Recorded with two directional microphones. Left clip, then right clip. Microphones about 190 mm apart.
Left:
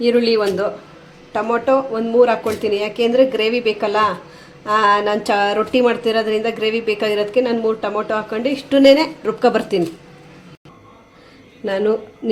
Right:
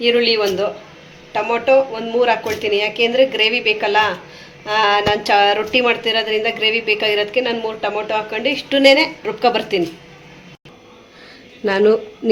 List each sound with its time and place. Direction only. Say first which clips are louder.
0.0 s speech: even; 55° left (ahead or behind)
11.6 s speech: right 4 dB; 15° right (ahead or behind)